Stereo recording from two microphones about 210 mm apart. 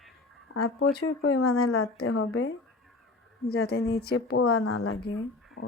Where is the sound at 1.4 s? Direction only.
90° left.